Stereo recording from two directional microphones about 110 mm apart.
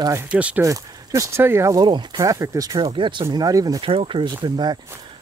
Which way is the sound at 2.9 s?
45° right (ahead or behind).